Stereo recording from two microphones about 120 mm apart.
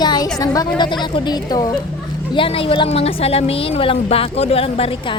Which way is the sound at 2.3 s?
50° left (ahead or behind).